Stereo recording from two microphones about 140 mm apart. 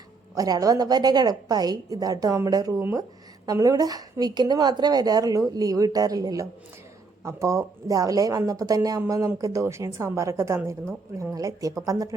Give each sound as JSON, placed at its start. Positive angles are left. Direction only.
{"t": 0.3, "sound": "speech", "side_deg": -25}